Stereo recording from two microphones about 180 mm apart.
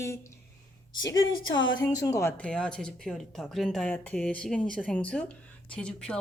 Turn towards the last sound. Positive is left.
turn(degrees=5)  # may be behind; listen again after turning